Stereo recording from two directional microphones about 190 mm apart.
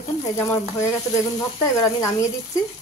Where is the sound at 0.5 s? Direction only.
15° left (ahead or behind).